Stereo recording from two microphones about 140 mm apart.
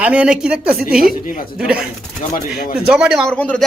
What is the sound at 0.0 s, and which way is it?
Speech, 10° right (ahead or behind).